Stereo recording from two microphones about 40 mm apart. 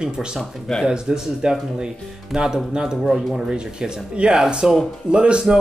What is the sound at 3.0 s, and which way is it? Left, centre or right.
Speech, centre.